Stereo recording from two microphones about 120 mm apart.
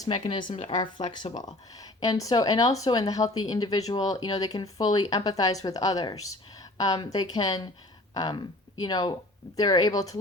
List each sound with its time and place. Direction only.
0.1 s speech: 45° left (ahead or behind)
0.5 s speech: 60° left (ahead or behind)
1.1 s speech: 35° left (ahead or behind)